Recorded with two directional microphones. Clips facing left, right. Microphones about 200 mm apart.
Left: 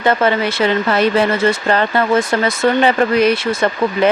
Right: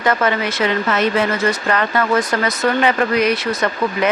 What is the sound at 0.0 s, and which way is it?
Speech, 30° left (ahead or behind).